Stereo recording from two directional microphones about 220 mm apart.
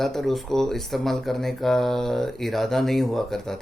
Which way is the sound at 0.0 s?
Centre (ahead or behind).